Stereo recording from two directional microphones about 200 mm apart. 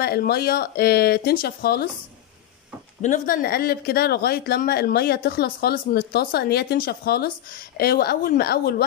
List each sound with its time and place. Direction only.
0.0 s speech: 50° left (ahead or behind)
3.0 s speech: 40° left (ahead or behind)